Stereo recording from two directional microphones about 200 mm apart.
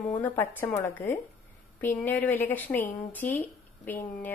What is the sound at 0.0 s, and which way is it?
A woman's voice, 5° left (ahead or behind).